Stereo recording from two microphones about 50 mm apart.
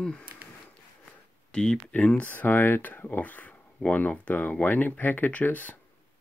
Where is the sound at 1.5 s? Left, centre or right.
Centre.